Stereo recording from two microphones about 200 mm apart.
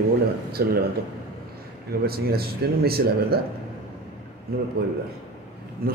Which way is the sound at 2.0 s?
50° right (ahead or behind).